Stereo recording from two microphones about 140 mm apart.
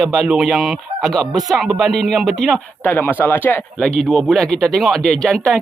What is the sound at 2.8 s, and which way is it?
Speech, 15° left (ahead or behind).